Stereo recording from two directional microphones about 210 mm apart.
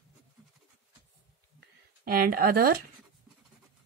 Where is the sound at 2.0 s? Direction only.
45° right (ahead or behind).